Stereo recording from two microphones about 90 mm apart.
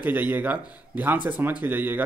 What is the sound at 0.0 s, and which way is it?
Speech, 20° right (ahead or behind).